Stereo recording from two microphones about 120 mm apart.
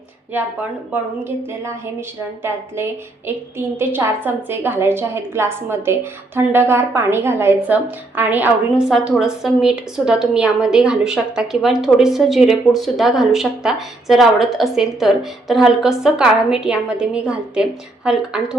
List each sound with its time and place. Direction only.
0.3 s speech: 15° right (ahead or behind)
3.8 s a woman's voice: 20° right (ahead or behind)